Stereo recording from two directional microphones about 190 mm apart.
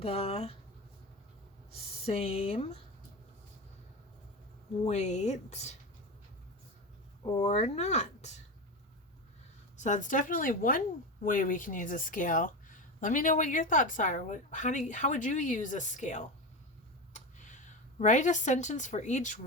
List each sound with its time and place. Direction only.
0.0 s speech: 30° left (ahead or behind)
2.0 s speech: 30° left (ahead or behind)
4.9 s speech: 35° left (ahead or behind)
7.4 s speech: 35° left (ahead or behind)
9.7 s a woman's voice: 40° left (ahead or behind)
18.0 s speech: 40° left (ahead or behind)